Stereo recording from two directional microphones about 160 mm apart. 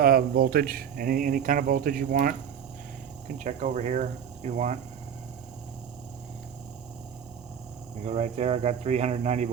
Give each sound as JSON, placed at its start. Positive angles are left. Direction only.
{"t": 0.0, "sound": "speech", "side_deg": -70}
{"t": 3.3, "sound": "speech", "side_deg": -45}
{"t": 8.0, "sound": "speech", "side_deg": -45}